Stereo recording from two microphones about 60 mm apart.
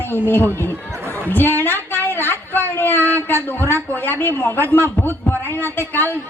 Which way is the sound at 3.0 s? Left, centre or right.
Right.